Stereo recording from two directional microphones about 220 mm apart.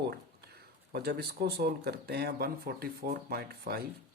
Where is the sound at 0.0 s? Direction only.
45° right (ahead or behind).